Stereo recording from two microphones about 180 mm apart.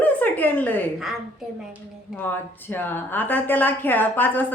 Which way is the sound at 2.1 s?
10° left (ahead or behind).